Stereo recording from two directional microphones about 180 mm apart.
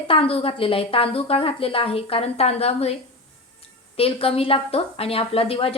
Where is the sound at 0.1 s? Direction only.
30° left (ahead or behind).